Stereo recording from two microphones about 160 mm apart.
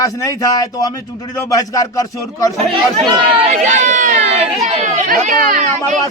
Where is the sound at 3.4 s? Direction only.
50° right (ahead or behind).